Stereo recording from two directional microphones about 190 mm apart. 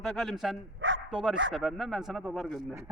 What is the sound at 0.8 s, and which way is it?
Bow-wow, 85° right.